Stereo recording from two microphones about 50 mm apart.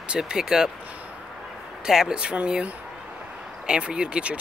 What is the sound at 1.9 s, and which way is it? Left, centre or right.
Speech, centre.